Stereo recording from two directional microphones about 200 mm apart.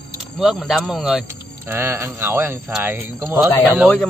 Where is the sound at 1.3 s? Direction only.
10° right (ahead or behind).